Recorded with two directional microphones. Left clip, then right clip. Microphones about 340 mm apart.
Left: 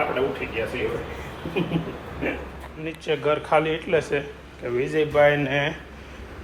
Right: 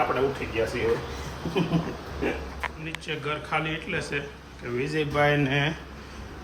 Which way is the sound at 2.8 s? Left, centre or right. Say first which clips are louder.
Left 7 dB; centre.